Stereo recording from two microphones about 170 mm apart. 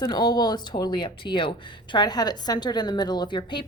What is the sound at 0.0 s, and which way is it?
A woman's voice, 25° left (ahead or behind).